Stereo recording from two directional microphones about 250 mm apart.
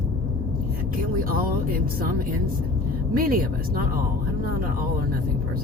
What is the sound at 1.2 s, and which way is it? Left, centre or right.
Speech, right.